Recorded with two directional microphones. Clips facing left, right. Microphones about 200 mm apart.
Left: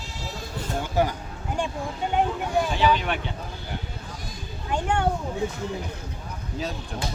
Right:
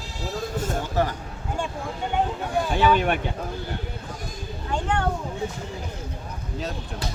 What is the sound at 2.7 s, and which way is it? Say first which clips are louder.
Speech: right 6 dB; 50° right (ahead or behind).